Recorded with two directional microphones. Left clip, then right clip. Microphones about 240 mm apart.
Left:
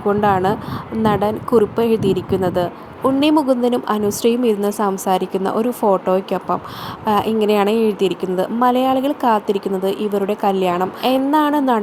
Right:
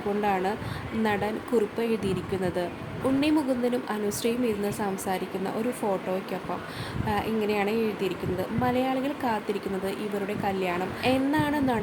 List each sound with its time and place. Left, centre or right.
0.2 s a woman's voice: left